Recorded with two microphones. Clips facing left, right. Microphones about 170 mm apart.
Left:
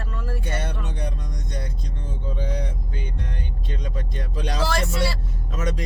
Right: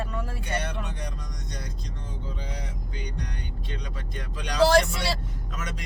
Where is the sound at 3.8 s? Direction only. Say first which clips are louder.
Left 5 dB; 45° left (ahead or behind).